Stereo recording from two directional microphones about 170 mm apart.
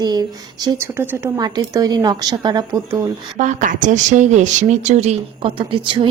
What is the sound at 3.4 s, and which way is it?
A woman's voice, 45° right (ahead or behind).